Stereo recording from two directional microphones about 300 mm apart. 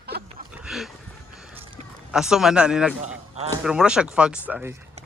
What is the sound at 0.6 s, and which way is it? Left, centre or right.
Speech, centre.